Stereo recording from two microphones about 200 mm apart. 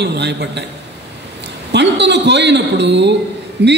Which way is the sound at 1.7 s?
60° right (ahead or behind).